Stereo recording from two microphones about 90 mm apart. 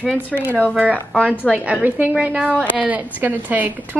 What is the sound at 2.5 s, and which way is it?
Speech, 20° left (ahead or behind).